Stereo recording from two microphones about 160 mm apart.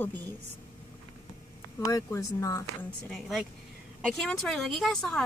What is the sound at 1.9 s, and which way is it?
Speech, 20° left (ahead or behind).